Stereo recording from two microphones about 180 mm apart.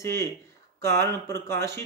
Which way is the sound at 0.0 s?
15° left (ahead or behind).